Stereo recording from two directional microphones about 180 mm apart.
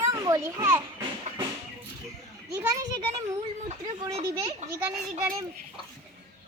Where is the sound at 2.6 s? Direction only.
20° right (ahead or behind).